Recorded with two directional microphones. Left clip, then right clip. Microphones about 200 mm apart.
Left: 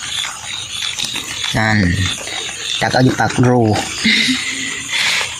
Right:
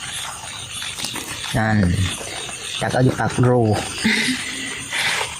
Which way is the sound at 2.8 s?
15° left (ahead or behind).